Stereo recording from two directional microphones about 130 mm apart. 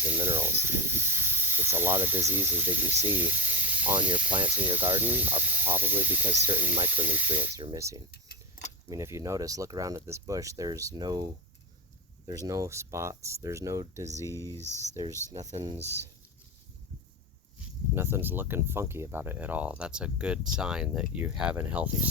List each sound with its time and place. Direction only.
0.0 s speech: 15° right (ahead or behind)
3.9 s speech: 40° right (ahead or behind)
4.4 s speech: 15° right (ahead or behind); by 11.3 s 30° right (ahead or behind)
12.5 s speech: 25° right (ahead or behind)
14.3 s speech: 20° left (ahead or behind)
15.3 s speech: 30° right (ahead or behind)
17.9 s speech: 20° right (ahead or behind)